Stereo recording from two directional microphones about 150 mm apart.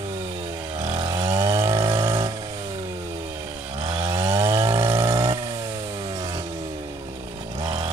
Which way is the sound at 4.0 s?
20° right (ahead or behind).